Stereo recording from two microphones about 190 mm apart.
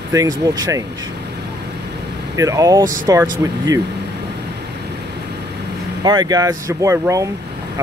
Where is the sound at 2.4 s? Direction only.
20° right (ahead or behind).